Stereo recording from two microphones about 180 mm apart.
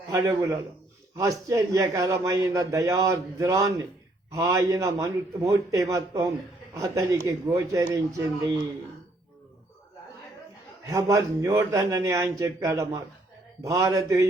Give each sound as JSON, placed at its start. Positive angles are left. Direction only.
{"t": 0.1, "sound": "a man's voice", "side_deg": -15}
{"t": 10.8, "sound": "a man's voice", "side_deg": -15}